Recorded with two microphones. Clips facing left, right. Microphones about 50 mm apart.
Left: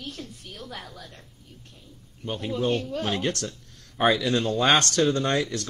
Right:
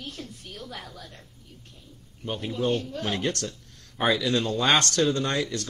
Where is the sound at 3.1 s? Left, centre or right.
Left.